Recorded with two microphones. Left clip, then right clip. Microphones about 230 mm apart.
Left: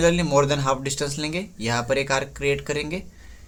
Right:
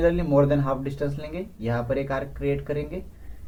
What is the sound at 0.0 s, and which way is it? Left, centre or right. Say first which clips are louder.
Speech: left 2 dB; left.